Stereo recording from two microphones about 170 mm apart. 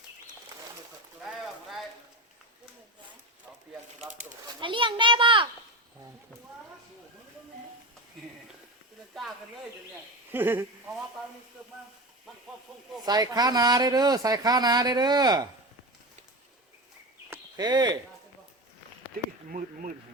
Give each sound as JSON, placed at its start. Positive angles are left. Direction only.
{"t": 1.2, "sound": "a sound", "side_deg": -5}
{"t": 4.6, "sound": "a sound", "side_deg": -30}
{"t": 10.3, "sound": "speech", "side_deg": -10}
{"t": 13.1, "sound": "speech", "side_deg": -25}
{"t": 17.6, "sound": "speech", "side_deg": -25}
{"t": 19.5, "sound": "speech", "side_deg": -50}